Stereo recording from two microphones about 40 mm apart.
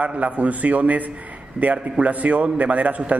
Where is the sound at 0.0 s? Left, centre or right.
Right.